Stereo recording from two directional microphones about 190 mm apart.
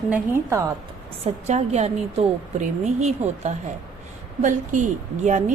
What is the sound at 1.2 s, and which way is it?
Speech, 35° right (ahead or behind).